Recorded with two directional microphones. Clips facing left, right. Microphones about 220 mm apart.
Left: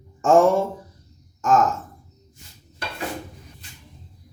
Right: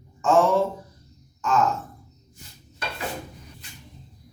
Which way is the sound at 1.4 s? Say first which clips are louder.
Left 4 dB; 45° left (ahead or behind).